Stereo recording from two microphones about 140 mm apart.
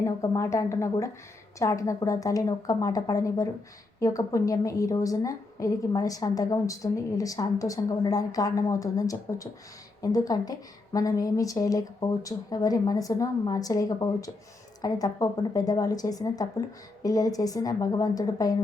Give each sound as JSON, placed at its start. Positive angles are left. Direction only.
{"t": 0.0, "sound": "a woman's voice", "side_deg": 20}